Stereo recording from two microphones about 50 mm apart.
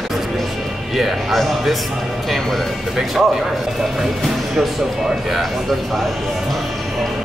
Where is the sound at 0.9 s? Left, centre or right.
Centre.